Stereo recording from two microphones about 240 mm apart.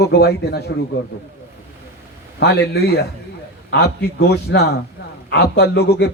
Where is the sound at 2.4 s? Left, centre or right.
Left.